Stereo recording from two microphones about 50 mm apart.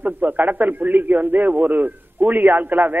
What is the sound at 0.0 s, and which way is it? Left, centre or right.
A man's voice, right.